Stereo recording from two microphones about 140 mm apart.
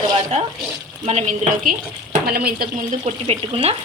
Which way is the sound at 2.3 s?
90° right.